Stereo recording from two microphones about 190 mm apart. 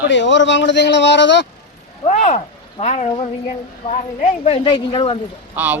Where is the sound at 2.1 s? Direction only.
40° left (ahead or behind).